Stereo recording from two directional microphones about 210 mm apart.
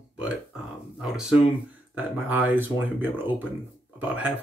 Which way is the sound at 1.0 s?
5° right (ahead or behind).